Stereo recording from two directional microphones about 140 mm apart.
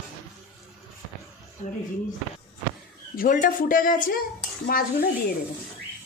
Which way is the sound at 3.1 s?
85° left.